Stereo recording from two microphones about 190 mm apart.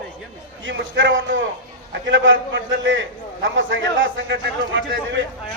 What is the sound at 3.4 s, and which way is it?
A man's voice, 80° right.